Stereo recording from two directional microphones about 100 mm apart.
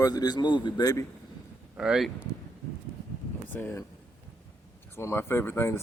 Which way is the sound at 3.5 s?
20° left (ahead or behind).